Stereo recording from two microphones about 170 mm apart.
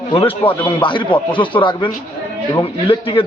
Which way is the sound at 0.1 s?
30° left (ahead or behind).